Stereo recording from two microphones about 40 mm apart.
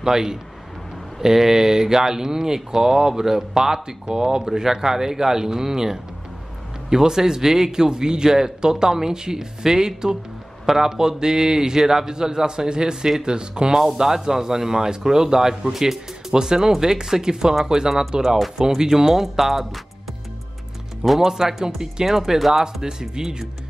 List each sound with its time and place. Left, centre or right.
0.0 s speech: centre
21.2 s speech: centre